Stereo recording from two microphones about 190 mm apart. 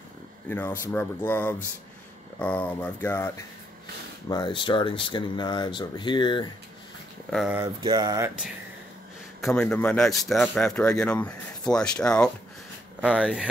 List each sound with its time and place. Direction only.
0.5 s speech: 10° left (ahead or behind)
4.3 s speech: 25° left (ahead or behind)
7.2 s a man's voice: centre (ahead or behind)
7.5 s a sound: 20° right (ahead or behind)
9.4 s a man's voice: 5° left (ahead or behind)